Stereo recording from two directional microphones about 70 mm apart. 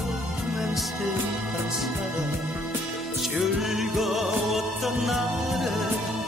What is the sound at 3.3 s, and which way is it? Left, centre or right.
Music, centre.